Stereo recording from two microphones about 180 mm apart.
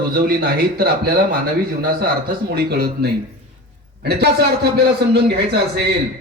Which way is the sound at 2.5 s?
60° right (ahead or behind).